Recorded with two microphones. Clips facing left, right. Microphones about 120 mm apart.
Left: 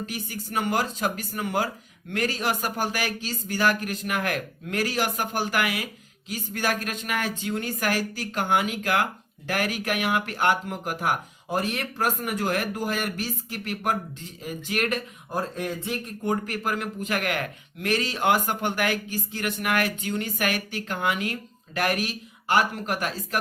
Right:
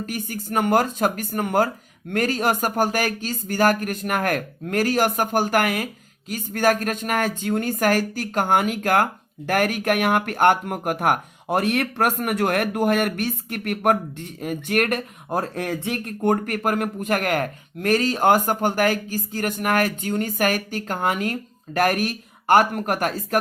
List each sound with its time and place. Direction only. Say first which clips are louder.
0.0 s speech: right 4 dB; 50° right (ahead or behind)